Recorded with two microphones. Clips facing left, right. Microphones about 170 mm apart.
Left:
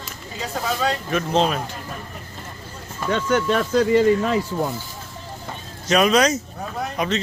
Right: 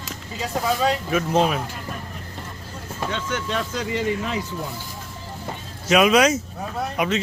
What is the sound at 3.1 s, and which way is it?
Speech, 50° left (ahead or behind).